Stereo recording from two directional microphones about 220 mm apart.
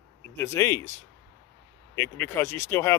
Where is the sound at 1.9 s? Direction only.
10° left (ahead or behind).